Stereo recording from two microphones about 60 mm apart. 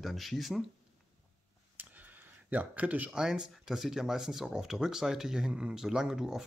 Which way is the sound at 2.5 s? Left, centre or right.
Right.